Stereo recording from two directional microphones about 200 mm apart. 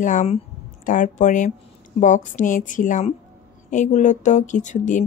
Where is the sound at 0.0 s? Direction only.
40° left (ahead or behind).